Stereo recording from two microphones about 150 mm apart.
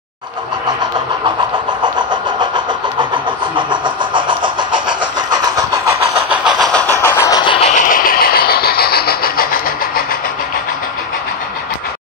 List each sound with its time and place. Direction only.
1.8 s vehicle: 30° right (ahead or behind); by 6.7 s 5° right (ahead or behind)
7.0 s vehicle: 20° left (ahead or behind)
7.4 s a sound: 40° left (ahead or behind)
7.7 s vehicle: 70° left (ahead or behind)